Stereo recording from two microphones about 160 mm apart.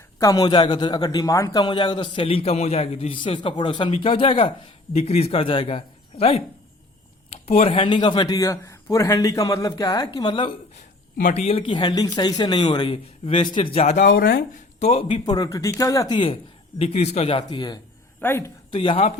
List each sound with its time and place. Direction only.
0.2 s a man's voice: 20° left (ahead or behind)
7.4 s speech: 40° left (ahead or behind)
11.2 s a man's voice: 50° left (ahead or behind); by 14.4 s 70° left (ahead or behind)
14.8 s a man's voice: 40° left (ahead or behind)
18.2 s speech: 15° left (ahead or behind)
18.7 s a man's voice: 30° left (ahead or behind)